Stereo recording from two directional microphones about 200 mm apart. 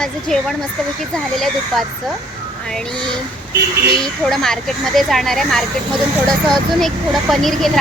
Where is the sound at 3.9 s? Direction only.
Centre (ahead or behind).